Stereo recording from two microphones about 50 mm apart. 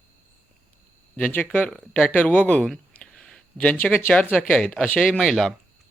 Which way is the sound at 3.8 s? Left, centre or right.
Left.